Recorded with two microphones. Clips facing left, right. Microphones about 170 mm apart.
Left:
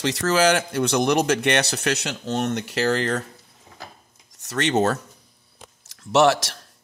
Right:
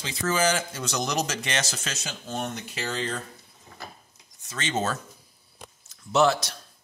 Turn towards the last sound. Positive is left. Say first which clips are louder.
# left 4 dB
turn(degrees=85)